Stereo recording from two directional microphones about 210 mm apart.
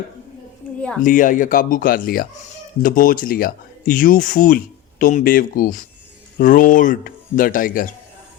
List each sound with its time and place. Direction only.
1.0 s speech: 40° left (ahead or behind)